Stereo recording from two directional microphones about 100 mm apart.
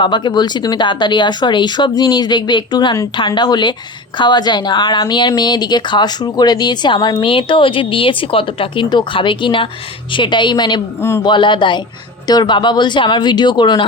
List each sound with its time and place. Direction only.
0.0 s speech: 50° left (ahead or behind)
7.2 s speech: 60° left (ahead or behind)